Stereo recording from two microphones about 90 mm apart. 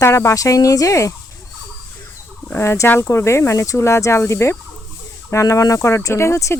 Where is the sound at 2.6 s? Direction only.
30° left (ahead or behind).